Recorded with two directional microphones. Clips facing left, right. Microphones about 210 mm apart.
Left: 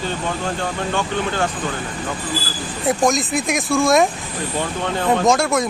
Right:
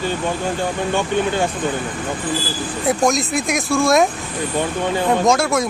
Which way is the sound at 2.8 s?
Centre (ahead or behind).